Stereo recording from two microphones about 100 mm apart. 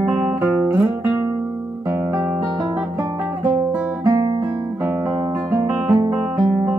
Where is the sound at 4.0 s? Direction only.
35° right (ahead or behind).